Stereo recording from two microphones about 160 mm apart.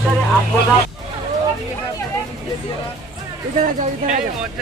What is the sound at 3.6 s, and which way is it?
Speech, 50° right (ahead or behind).